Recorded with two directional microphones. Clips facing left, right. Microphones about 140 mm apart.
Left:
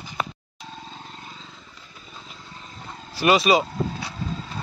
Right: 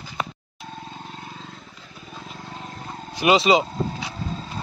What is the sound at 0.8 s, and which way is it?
Vehicle, 55° right (ahead or behind).